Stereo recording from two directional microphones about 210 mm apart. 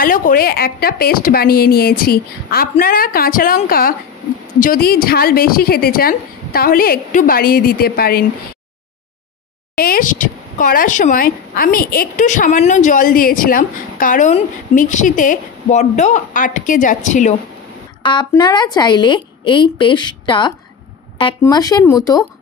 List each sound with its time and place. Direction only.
0.0 s a woman's voice: 40° left (ahead or behind)
9.8 s a woman's voice: 45° left (ahead or behind)
18.0 s a woman's voice: 20° left (ahead or behind)